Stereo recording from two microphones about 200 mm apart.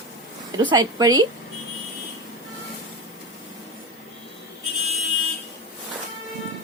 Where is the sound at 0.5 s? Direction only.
20° right (ahead or behind).